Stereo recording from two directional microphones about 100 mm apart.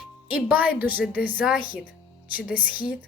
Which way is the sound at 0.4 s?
15° right (ahead or behind).